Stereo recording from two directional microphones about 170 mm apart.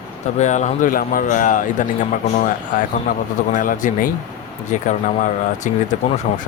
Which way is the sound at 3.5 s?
50° left (ahead or behind).